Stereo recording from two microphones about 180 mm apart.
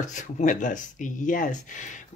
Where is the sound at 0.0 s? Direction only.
45° left (ahead or behind).